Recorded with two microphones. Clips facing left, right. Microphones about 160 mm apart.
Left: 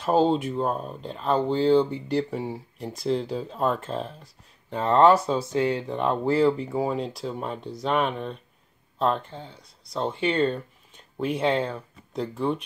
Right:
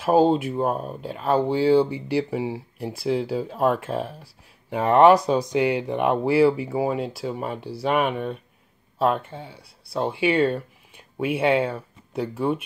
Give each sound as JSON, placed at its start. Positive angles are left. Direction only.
{"t": 0.0, "sound": "speech", "side_deg": -5}